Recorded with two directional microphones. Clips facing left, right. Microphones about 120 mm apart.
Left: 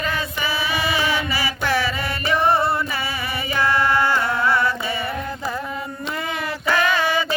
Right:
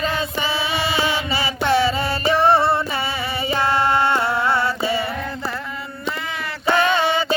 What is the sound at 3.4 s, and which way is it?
Music, 30° right (ahead or behind).